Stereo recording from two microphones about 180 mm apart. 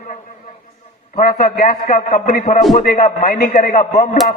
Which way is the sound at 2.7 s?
55° left (ahead or behind).